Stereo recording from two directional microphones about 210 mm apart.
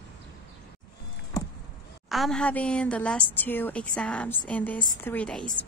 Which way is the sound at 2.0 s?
Centre (ahead or behind).